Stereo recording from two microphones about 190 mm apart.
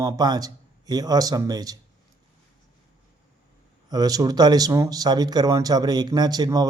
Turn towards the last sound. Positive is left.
turn(degrees=-20)  # may be behind; listen again after turning